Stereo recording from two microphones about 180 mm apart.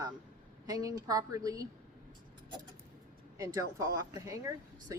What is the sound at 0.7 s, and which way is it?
Speech, 20° right (ahead or behind).